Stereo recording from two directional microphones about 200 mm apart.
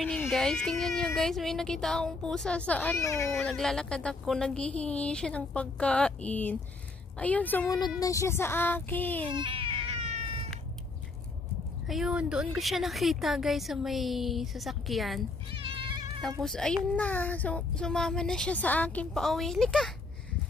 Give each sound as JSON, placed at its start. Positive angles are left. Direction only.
{"t": 0.0, "sound": "speech", "side_deg": 5}
{"t": 3.3, "sound": "speech", "side_deg": 5}
{"t": 9.3, "sound": "cat", "side_deg": -25}
{"t": 11.9, "sound": "speech", "side_deg": -5}
{"t": 15.6, "sound": "cat", "side_deg": -25}
{"t": 16.2, "sound": "speech", "side_deg": 0}